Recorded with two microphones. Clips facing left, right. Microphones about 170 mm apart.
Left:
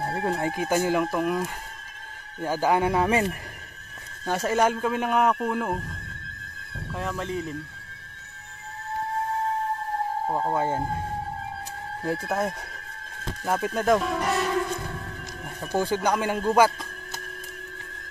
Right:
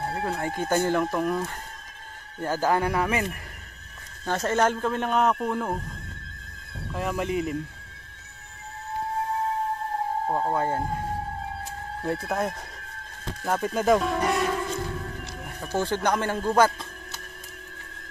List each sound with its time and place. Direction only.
0.2 s speech: 20° left (ahead or behind)
0.6 s speech: 5° left (ahead or behind); by 3.3 s 25° left (ahead or behind)
4.3 s speech: 10° left (ahead or behind)
7.0 s speech: 10° right (ahead or behind)
10.2 s speech: centre (ahead or behind)
10.5 s speech: 15° left (ahead or behind)
12.3 s speech: 5° left (ahead or behind)
15.6 s speech: 10° left (ahead or behind)